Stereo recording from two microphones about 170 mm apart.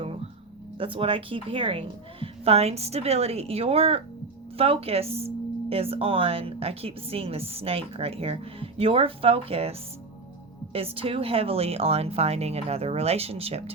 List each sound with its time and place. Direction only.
0.8 s speech: 30° right (ahead or behind)